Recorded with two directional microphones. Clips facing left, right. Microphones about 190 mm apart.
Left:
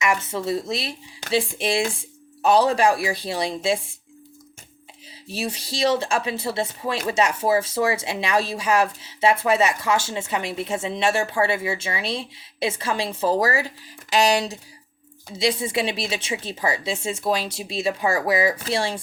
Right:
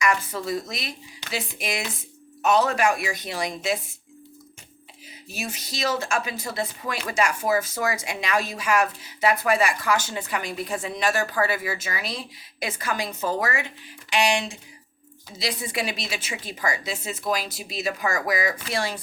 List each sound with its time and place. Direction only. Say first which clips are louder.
0.0 s speech: left 2 dB; 25° left (ahead or behind)
5.3 s speech: left 5 dB; 30° left (ahead or behind)
15.4 s speech: left 6 dB; 25° left (ahead or behind)